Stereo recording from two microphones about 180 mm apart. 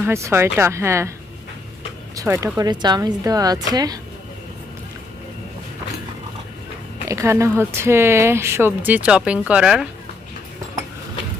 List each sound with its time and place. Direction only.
0.0 s speech: 15° right (ahead or behind)
2.1 s speech: 15° right (ahead or behind)
7.1 s speech: 15° right (ahead or behind)